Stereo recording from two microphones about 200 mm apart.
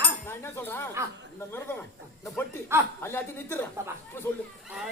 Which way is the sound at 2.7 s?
10° right (ahead or behind).